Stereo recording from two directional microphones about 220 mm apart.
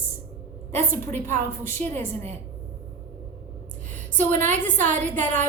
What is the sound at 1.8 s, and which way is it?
Speech, 30° right (ahead or behind).